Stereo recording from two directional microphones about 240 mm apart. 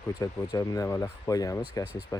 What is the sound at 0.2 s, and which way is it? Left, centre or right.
Speech, centre.